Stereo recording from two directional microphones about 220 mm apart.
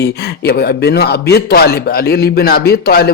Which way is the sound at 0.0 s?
45° left (ahead or behind).